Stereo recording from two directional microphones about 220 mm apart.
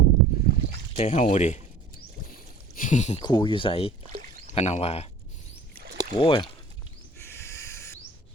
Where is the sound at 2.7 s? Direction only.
35° left (ahead or behind).